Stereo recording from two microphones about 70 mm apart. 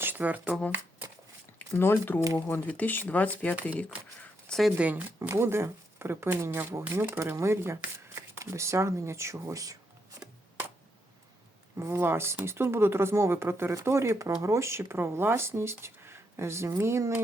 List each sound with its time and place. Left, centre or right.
0.0 s speech: right
1.8 s speech: left
4.4 s a sound: centre
4.8 s speech: right
5.3 s speech: right
11.8 s speech: right